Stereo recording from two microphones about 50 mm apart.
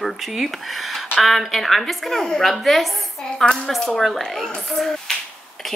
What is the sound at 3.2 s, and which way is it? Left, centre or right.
Speech, centre.